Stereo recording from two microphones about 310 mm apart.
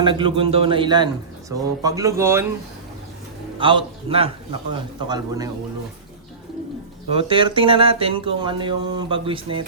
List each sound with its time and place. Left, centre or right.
0.0 s speech: centre
3.6 s speech: centre
7.1 s speech: centre